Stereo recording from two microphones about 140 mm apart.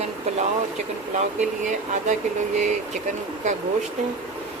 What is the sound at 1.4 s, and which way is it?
Speech, 60° right (ahead or behind).